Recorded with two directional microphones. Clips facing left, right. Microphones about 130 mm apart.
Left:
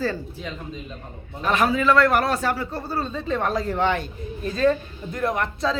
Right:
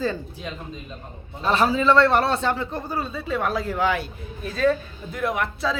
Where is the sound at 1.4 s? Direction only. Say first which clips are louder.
Even; 30° right (ahead or behind).